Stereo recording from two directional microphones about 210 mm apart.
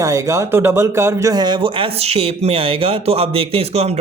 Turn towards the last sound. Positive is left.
turn(degrees=-30)  # may be behind; listen again after turning